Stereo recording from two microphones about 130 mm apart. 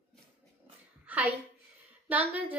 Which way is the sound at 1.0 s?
10° right (ahead or behind).